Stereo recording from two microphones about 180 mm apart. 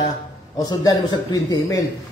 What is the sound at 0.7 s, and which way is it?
Speech, 20° left (ahead or behind).